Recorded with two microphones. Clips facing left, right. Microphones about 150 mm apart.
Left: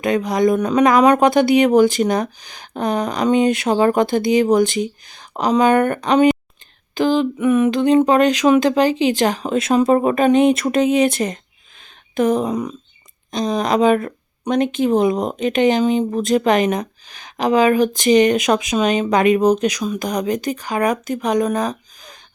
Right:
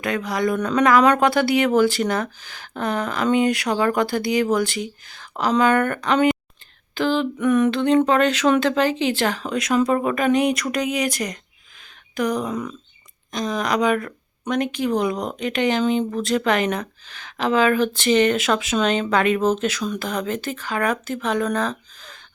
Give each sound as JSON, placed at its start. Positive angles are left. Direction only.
{"t": 0.0, "sound": "speech", "side_deg": 20}